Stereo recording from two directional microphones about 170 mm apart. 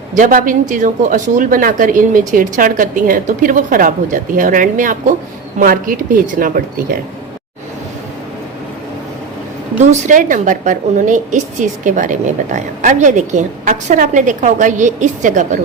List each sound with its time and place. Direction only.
0.2 s a woman's voice: 50° right (ahead or behind)
9.8 s a woman's voice: 45° right (ahead or behind)